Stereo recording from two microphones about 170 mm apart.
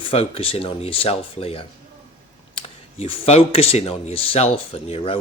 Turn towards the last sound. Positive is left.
turn(degrees=35)  # may be behind; listen again after turning